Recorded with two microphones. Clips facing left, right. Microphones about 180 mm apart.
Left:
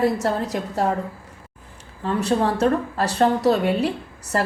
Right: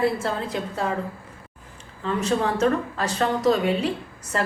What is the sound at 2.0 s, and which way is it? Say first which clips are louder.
Speech: left 3 dB; 50° left (ahead or behind).